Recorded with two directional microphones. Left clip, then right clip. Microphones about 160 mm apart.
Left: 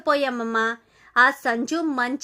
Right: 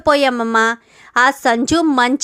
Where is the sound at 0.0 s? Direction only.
25° right (ahead or behind).